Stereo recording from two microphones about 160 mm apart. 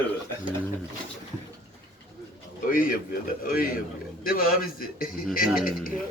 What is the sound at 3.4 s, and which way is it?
A man's voice, 65° left (ahead or behind).